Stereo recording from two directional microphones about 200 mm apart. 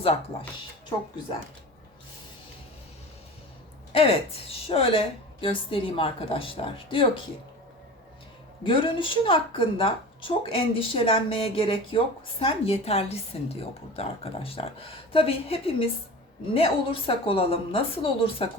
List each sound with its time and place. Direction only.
3.9 s a woman's voice: 30° left (ahead or behind)
8.6 s a woman's voice: 25° left (ahead or behind)